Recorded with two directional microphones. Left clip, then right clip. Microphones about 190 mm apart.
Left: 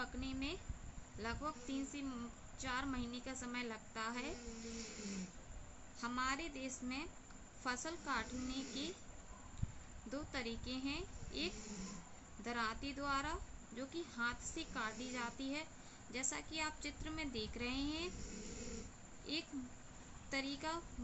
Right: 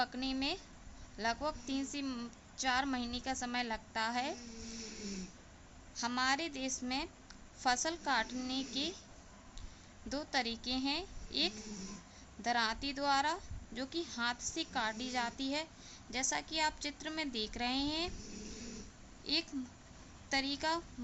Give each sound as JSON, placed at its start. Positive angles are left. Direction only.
{"t": 0.0, "sound": "a woman's voice", "side_deg": -55}
{"t": 6.0, "sound": "a woman's voice", "side_deg": -50}
{"t": 10.1, "sound": "a woman's voice", "side_deg": -50}
{"t": 19.2, "sound": "a woman's voice", "side_deg": -50}